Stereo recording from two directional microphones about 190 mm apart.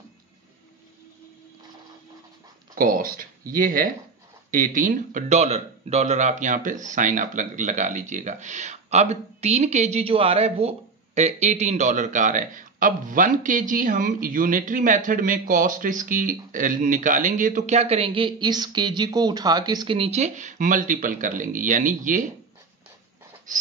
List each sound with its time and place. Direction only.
2.7 s a man's voice: 50° right (ahead or behind)